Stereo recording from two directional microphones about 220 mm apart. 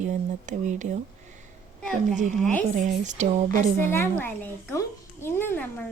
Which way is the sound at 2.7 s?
35° right (ahead or behind).